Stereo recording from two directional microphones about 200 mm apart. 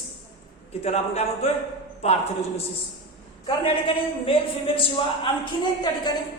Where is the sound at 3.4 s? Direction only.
25° left (ahead or behind).